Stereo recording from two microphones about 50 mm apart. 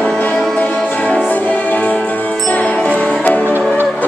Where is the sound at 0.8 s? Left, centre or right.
Left.